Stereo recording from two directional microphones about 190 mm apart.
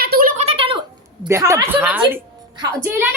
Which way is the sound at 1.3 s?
15° right (ahead or behind).